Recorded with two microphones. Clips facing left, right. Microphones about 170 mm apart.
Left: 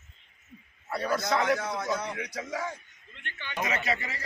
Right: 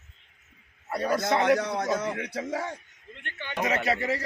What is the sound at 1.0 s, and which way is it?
A man's voice, 45° right (ahead or behind).